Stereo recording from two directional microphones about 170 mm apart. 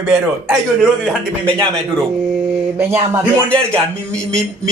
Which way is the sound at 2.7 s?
15° right (ahead or behind).